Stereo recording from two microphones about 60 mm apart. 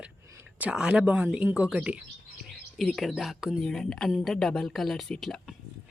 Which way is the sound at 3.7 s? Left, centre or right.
Centre.